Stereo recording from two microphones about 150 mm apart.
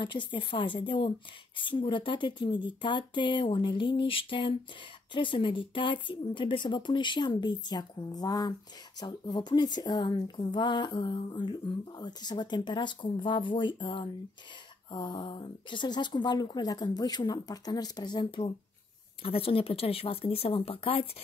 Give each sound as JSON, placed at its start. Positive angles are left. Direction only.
{"t": 0.0, "sound": "speech", "side_deg": 30}